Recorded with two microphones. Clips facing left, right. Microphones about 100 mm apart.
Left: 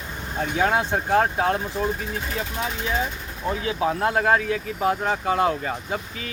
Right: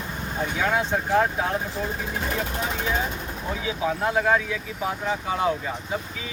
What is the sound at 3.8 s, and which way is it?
Speech, 45° left (ahead or behind).